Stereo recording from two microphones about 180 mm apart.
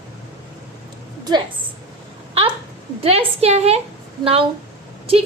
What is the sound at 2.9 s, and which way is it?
Speech, 35° right (ahead or behind).